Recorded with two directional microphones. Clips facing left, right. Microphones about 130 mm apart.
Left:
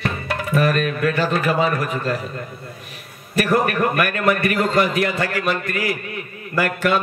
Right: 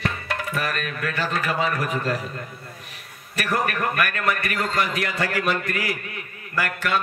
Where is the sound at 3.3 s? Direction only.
25° left (ahead or behind).